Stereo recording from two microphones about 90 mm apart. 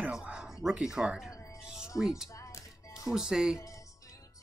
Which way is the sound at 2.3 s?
35° left (ahead or behind).